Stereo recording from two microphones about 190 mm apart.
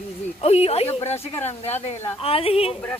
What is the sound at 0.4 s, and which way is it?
A woman's voice, 30° left (ahead or behind).